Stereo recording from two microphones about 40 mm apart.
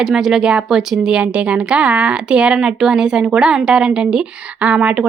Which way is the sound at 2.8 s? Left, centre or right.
Centre.